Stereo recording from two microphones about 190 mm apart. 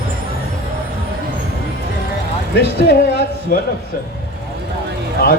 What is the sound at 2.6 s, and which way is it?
A man's voice, 55° left (ahead or behind).